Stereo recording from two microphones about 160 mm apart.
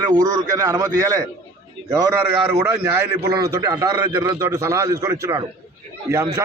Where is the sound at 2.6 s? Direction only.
15° right (ahead or behind).